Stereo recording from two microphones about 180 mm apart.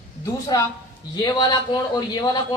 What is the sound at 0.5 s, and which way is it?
A woman's voice, 20° left (ahead or behind).